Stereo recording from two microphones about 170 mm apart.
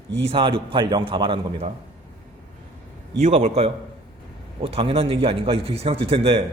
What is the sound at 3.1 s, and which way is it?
A man's voice, 40° right (ahead or behind).